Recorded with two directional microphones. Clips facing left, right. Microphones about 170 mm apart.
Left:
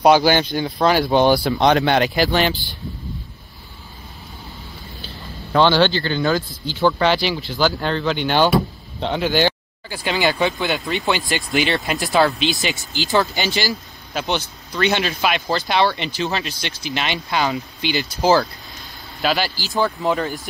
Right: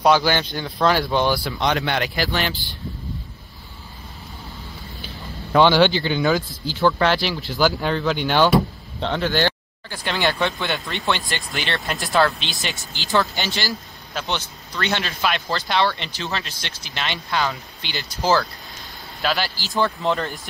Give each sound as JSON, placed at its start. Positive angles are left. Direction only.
{"t": 0.0, "sound": "speech", "side_deg": 15}
{"t": 1.6, "sound": "speech", "side_deg": 30}
{"t": 5.6, "sound": "a man's voice", "side_deg": -10}
{"t": 6.2, "sound": "speech", "side_deg": 0}
{"t": 19.2, "sound": "speech", "side_deg": 5}